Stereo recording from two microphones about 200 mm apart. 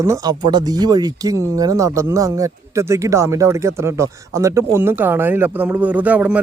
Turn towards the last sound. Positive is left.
turn(degrees=-5)  # may be behind; listen again after turning